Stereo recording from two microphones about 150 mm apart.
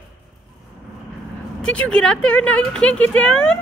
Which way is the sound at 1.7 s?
5° left (ahead or behind).